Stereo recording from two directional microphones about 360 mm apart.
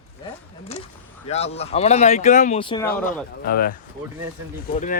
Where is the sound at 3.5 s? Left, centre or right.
Left.